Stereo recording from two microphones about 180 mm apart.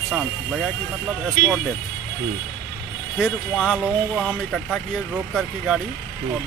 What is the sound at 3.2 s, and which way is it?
Speech, centre (ahead or behind).